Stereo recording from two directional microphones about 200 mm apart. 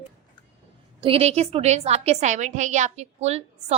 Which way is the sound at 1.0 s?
30° right (ahead or behind).